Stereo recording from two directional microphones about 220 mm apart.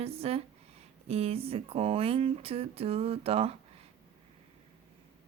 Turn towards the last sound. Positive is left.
turn(degrees=-25)  # may be behind; listen again after turning